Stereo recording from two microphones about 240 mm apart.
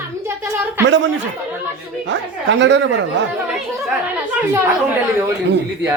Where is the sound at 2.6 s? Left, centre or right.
Right.